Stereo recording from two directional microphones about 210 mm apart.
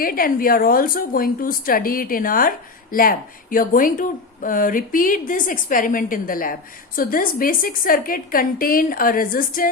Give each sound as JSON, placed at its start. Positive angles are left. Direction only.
{"t": 0.0, "sound": "a woman's voice", "side_deg": 45}